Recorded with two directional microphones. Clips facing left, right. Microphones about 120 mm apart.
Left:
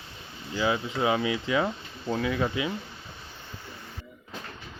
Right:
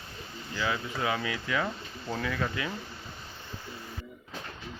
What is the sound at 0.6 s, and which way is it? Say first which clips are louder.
Speech: left 5 dB; 20° left (ahead or behind).